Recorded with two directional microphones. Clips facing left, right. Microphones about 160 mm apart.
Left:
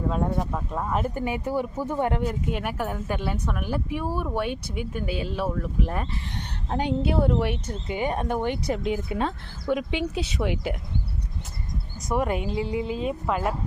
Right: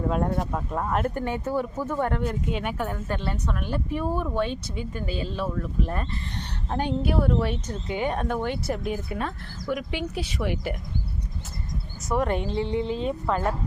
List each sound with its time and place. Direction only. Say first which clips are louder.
0.1 s speech: even; centre (ahead or behind)
6.7 s speech: left 1 dB; 20° left (ahead or behind)
12.0 s speech: even; 10° left (ahead or behind)